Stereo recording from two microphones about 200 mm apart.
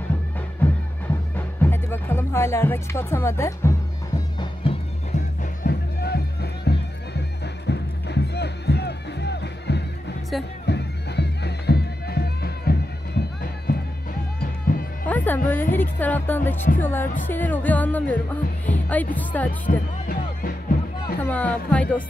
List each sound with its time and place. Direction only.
0.6 s music: 10° left (ahead or behind)
4.4 s music: 30° left (ahead or behind); by 10.1 s 60° left (ahead or behind)
10.7 s bagpipes: 55° left (ahead or behind)
14.4 s music: 45° left (ahead or behind)
15.0 s speech: 10° left (ahead or behind)
20.1 s music: 45° left (ahead or behind)
21.2 s speech: 10° left (ahead or behind)